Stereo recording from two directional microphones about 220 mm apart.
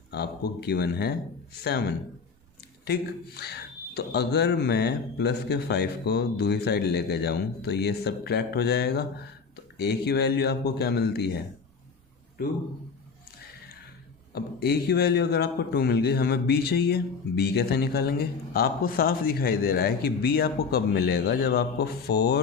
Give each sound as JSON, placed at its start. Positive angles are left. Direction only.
{"t": 0.1, "sound": "a man's voice", "side_deg": 45}
{"t": 2.8, "sound": "a man's voice", "side_deg": 45}
{"t": 14.3, "sound": "a man's voice", "side_deg": 45}